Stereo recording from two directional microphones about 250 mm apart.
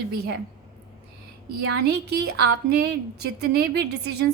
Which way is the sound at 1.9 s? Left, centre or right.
Right.